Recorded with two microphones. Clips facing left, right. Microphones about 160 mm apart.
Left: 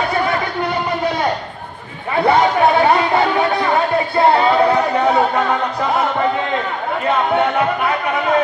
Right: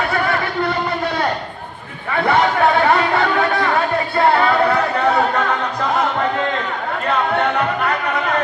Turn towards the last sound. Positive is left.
turn(degrees=10)  # may be behind; listen again after turning